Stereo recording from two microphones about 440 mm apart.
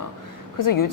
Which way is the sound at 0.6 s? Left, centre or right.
Left.